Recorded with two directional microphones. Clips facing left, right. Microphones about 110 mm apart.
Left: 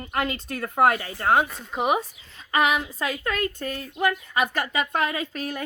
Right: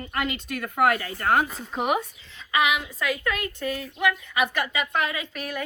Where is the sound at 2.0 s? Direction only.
40° left (ahead or behind).